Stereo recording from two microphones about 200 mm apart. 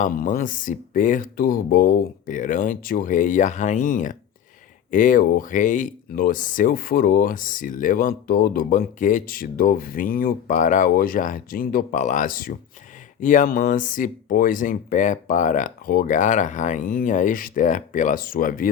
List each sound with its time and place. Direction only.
0.0 s speech: 45° left (ahead or behind)